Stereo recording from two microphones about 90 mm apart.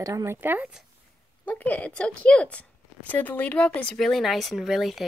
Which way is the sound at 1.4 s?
15° left (ahead or behind).